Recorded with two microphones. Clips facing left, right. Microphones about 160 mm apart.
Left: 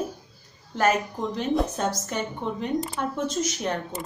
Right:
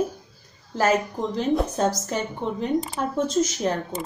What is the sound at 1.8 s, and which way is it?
Speech, 35° right (ahead or behind).